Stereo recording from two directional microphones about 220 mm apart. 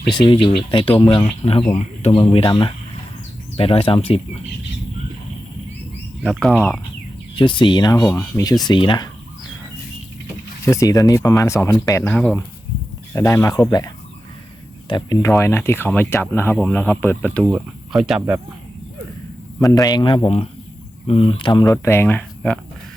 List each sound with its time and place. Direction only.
0.1 s speech: 20° left (ahead or behind)
6.2 s speech: 5° left (ahead or behind)
7.3 s speech: 20° left (ahead or behind)
10.7 s speech: 15° left (ahead or behind)
17.4 s speech: 5° right (ahead or behind)
19.5 s speech: 15° left (ahead or behind)